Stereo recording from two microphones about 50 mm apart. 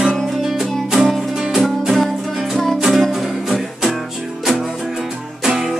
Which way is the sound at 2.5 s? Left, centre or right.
Centre.